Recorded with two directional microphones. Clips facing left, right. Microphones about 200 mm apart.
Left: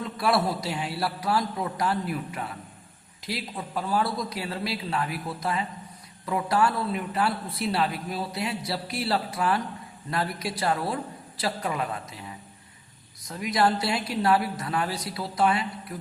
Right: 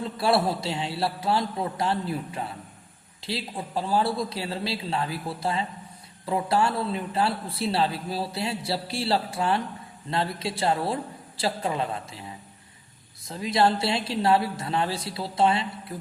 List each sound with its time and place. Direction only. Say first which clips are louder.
0.0 s a man's voice: right 2 dB; 30° right (ahead or behind)
13.2 s a man's voice: right 1 dB; 30° right (ahead or behind)